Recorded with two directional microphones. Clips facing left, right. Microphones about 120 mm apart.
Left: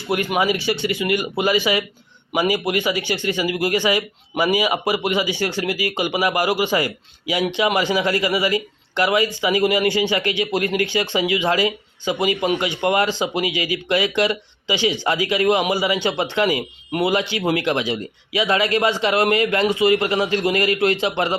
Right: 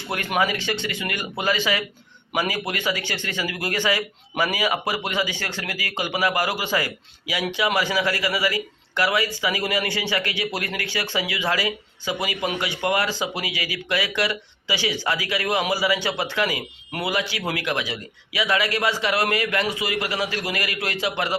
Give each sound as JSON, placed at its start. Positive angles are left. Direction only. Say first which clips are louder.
{"t": 0.1, "sound": "speech", "louder": "left 4 dB", "side_deg": 10}